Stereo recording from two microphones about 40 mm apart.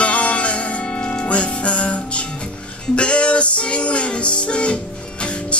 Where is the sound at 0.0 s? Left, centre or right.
Left.